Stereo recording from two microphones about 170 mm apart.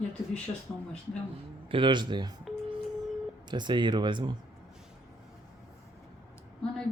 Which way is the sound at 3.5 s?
25° right (ahead or behind).